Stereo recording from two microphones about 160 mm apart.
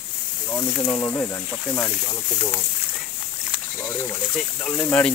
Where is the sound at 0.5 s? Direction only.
20° left (ahead or behind).